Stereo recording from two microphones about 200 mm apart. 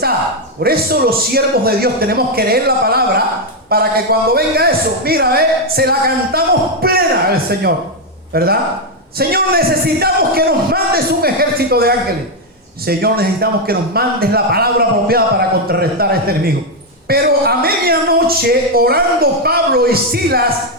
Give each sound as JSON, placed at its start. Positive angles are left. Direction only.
{"t": 0.6, "sound": "a man's voice", "side_deg": -50}